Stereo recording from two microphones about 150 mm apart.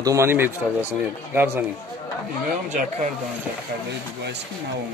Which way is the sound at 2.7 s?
55° right (ahead or behind).